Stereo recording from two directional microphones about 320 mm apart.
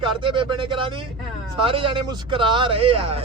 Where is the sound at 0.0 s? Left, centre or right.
Centre.